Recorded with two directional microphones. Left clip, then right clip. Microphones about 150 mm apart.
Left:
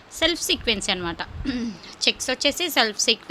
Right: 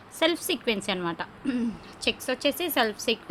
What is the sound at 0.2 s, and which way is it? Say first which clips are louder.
A woman's voice: left 3 dB; 5° right (ahead or behind).